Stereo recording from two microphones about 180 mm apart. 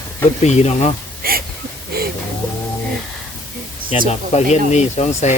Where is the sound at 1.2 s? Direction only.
55° right (ahead or behind).